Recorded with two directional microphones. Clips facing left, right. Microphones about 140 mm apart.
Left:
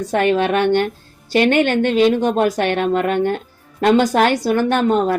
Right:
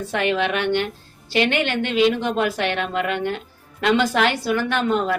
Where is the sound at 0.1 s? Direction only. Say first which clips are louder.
Left 6 dB; 45° left (ahead or behind).